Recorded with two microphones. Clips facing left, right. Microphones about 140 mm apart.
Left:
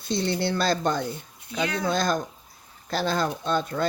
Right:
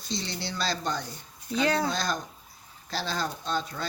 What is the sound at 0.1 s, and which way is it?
Speech, 55° left (ahead or behind).